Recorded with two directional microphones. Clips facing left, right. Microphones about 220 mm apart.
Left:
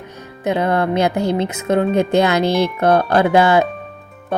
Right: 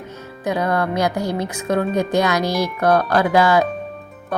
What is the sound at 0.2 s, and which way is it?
Speech, 25° left (ahead or behind).